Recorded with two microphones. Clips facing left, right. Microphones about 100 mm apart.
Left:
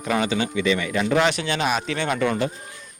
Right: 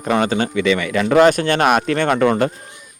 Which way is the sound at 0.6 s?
75° right (ahead or behind).